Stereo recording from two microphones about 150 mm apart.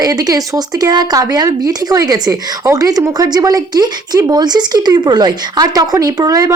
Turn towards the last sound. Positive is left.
turn(degrees=-25)  # may be behind; listen again after turning